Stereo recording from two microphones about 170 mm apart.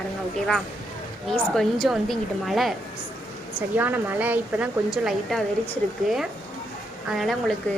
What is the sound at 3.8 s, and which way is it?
A woman's voice, 10° right (ahead or behind).